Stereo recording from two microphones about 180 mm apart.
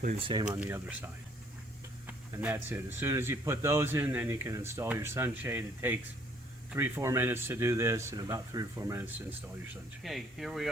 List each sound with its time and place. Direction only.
0.2 s speech: 30° right (ahead or behind)
0.4 s a man's voice: 10° right (ahead or behind)
10.0 s speech: centre (ahead or behind)